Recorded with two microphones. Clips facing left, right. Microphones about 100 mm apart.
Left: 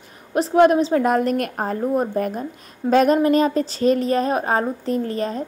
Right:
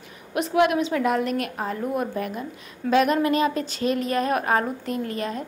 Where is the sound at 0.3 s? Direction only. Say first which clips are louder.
Left 6 dB; 35° left (ahead or behind).